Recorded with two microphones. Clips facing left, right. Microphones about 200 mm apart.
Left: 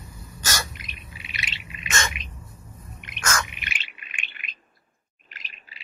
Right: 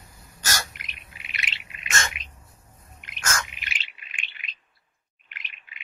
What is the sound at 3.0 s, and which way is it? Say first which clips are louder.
Chirp: left 3 dB; 65° left (ahead or behind).